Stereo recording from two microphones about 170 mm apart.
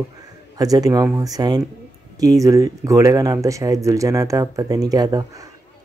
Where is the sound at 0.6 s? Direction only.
20° right (ahead or behind).